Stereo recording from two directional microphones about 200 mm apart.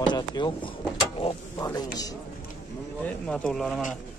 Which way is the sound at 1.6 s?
20° left (ahead or behind).